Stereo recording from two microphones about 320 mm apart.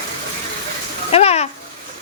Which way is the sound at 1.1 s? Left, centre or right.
Centre.